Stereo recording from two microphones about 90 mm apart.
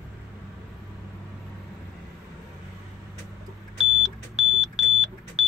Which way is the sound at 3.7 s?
5° right (ahead or behind).